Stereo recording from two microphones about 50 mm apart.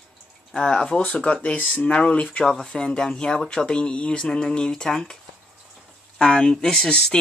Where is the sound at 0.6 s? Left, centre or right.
Centre.